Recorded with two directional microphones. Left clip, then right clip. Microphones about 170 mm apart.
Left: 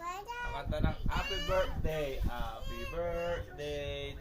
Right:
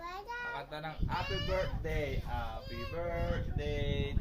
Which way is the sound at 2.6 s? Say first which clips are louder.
Left 2 dB; centre (ahead or behind).